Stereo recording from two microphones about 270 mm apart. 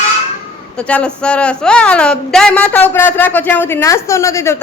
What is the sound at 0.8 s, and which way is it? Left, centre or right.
A man's voice, centre.